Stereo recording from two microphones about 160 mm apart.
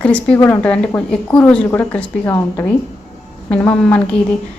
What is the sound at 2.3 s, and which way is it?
Speech, 20° left (ahead or behind).